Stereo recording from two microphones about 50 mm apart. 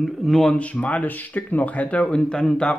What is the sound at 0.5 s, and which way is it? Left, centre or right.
Speech, left.